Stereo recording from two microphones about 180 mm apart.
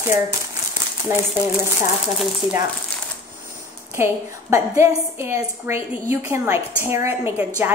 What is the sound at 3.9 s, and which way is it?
A woman's voice, 15° right (ahead or behind).